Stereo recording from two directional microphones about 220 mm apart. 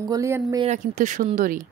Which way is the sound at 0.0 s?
15° right (ahead or behind).